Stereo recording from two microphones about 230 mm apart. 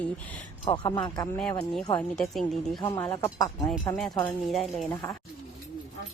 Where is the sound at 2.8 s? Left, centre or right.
Centre.